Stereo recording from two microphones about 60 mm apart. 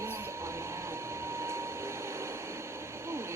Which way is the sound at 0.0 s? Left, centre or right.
Right.